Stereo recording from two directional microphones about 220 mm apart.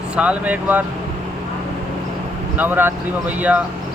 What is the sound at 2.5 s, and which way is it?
Speech, 10° right (ahead or behind).